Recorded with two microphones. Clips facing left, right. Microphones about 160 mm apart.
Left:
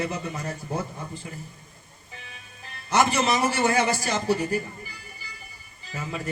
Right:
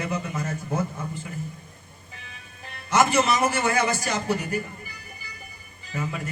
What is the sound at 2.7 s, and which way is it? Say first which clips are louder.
Speech: right 1 dB; 35° left (ahead or behind).